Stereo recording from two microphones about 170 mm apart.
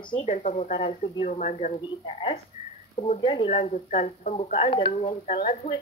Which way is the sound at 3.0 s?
45° left (ahead or behind).